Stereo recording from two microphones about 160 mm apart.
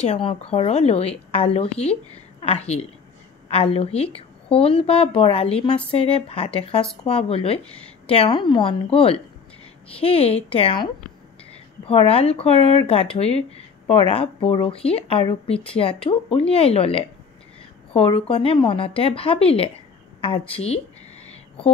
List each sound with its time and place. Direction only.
0.0 s speech: 40° left (ahead or behind)